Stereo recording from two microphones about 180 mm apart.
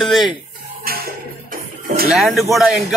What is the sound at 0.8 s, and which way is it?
Music, 55° right (ahead or behind).